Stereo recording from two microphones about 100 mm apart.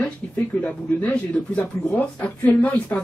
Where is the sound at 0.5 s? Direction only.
10° left (ahead or behind).